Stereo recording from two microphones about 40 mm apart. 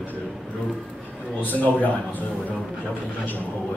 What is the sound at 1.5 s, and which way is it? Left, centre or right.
Speech, left.